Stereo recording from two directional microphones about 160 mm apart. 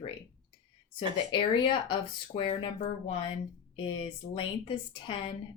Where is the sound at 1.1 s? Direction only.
30° left (ahead or behind).